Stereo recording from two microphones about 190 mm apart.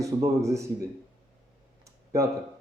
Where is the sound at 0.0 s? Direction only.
15° right (ahead or behind).